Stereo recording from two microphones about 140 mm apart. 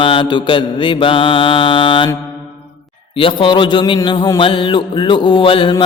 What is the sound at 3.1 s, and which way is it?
Mantra, 40° left (ahead or behind).